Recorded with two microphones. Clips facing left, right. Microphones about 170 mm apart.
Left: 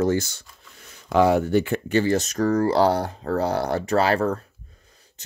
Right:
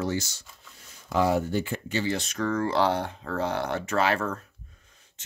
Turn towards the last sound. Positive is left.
turn(degrees=40)  # may be behind; listen again after turning